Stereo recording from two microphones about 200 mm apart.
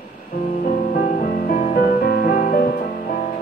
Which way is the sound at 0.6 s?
40° left (ahead or behind).